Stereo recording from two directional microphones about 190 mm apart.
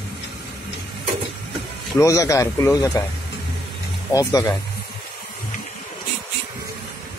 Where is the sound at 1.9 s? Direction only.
15° left (ahead or behind).